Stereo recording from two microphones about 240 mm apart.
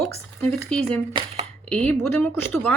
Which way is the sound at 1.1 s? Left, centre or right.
Right.